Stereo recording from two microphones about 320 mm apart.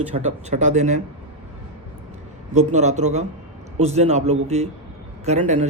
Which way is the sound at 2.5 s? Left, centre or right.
Right.